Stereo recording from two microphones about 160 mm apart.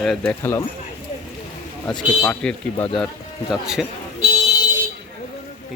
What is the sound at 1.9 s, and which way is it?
Speech, 25° left (ahead or behind).